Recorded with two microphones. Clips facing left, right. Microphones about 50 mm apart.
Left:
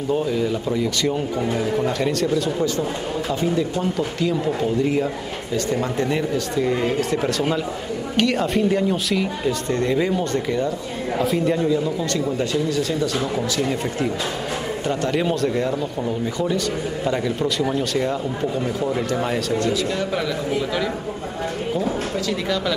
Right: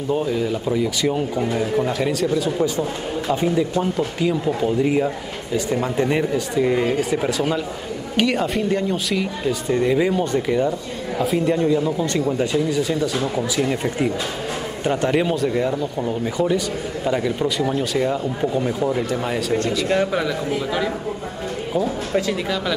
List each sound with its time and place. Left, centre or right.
0.1 s a man's voice: centre
3.3 s speech: centre
4.8 s speech: centre
6.0 s speech: right
6.5 s a man's voice: centre
11.1 s a man's voice: centre
11.6 s speech: centre
15.2 s a man's voice: centre